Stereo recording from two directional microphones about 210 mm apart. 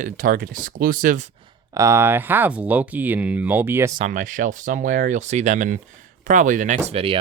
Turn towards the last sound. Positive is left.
turn(degrees=-25)  # may be behind; listen again after turning